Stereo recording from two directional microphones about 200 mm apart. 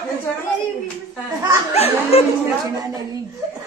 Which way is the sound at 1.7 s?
30° left (ahead or behind).